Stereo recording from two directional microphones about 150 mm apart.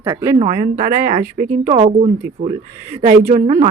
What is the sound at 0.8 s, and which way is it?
Speech, 70° right (ahead or behind).